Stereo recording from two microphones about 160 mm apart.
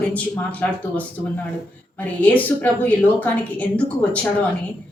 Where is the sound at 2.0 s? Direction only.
10° left (ahead or behind).